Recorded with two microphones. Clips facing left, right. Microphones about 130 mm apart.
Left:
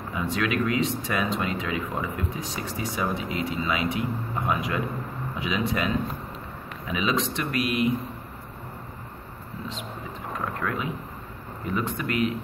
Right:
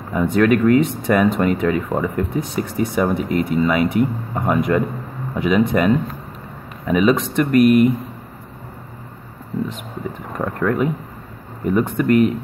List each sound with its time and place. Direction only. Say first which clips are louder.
0.1 s speech: right 12 dB; 50° right (ahead or behind)
10.3 s speech: right 9 dB; 55° right (ahead or behind)